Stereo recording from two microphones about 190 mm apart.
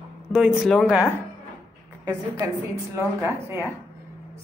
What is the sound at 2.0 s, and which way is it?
Speech, 15° right (ahead or behind).